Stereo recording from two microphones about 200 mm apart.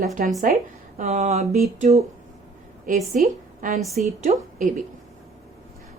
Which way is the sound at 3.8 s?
Centre (ahead or behind).